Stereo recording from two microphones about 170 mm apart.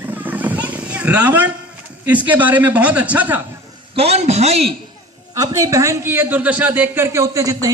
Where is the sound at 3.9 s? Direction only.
35° right (ahead or behind).